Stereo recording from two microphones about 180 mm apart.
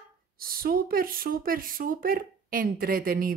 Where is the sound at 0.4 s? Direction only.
55° right (ahead or behind).